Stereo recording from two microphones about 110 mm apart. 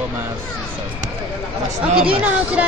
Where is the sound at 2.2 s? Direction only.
15° right (ahead or behind).